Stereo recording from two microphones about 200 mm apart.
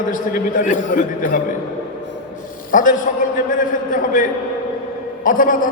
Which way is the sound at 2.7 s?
40° left (ahead or behind).